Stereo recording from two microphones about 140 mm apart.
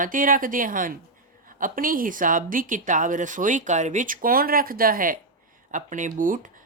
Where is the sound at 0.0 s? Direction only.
80° right.